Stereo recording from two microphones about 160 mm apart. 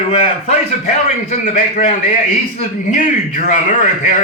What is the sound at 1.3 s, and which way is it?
A man's voice, 50° left (ahead or behind).